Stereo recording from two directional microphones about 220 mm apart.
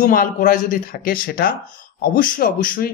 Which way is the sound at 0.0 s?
40° left (ahead or behind).